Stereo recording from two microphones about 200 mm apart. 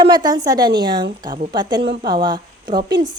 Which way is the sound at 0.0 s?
20° right (ahead or behind).